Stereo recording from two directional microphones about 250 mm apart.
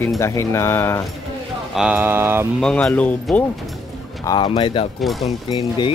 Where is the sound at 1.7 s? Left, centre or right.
Centre.